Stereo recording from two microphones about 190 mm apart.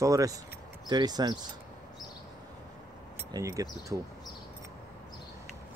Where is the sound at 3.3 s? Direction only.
15° right (ahead or behind).